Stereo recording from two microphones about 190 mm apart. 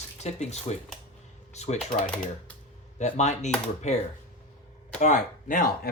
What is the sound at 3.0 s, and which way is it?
Speech, 35° left (ahead or behind).